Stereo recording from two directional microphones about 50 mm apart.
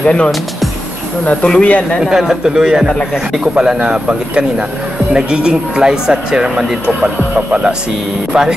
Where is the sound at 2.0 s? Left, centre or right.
Centre.